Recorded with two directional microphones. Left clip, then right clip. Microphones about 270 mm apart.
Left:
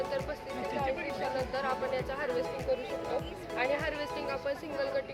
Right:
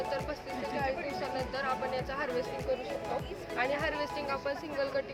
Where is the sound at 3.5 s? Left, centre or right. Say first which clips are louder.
Even; centre.